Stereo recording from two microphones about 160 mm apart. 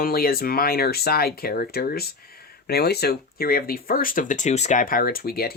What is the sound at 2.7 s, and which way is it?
Speech, 85° left.